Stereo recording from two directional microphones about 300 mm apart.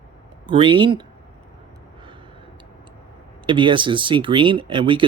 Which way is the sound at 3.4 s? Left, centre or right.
Centre.